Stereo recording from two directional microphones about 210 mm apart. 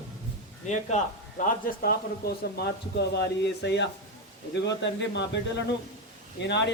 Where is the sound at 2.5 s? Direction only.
50° left (ahead or behind).